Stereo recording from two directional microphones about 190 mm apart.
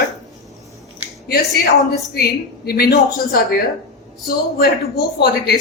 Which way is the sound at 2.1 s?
55° left (ahead or behind).